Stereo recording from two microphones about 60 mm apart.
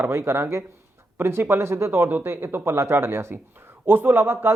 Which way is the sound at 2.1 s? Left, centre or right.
Right.